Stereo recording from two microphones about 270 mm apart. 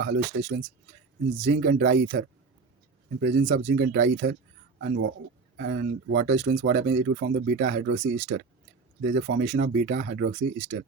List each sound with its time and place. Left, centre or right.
0.0 s speech: right
6.3 s speech: right